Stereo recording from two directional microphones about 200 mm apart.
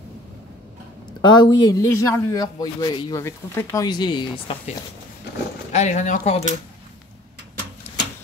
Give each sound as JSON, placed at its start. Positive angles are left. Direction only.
{"t": 1.2, "sound": "speech", "side_deg": 20}
{"t": 5.7, "sound": "speech", "side_deg": 35}